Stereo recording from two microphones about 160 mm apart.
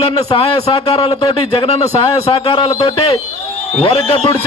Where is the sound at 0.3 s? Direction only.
35° left (ahead or behind).